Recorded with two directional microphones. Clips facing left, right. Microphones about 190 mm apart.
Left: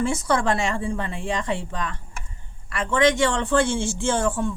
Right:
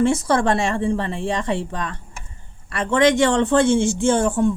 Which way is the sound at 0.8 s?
25° right (ahead or behind).